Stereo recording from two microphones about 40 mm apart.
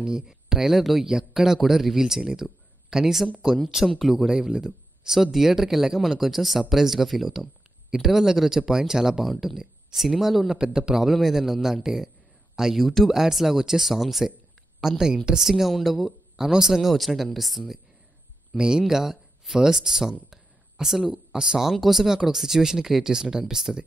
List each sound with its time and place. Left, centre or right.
0.0 s a man's voice: centre
4.4 s a man's voice: centre
9.2 s a man's voice: centre
10.5 s a man's voice: centre
11.1 s a man's voice: centre
16.9 s a man's voice: centre
18.6 s a man's voice: centre
20.2 s a sound: centre
21.3 s a man's voice: centre